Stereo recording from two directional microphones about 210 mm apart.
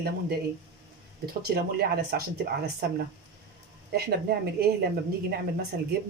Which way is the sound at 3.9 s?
45° right (ahead or behind).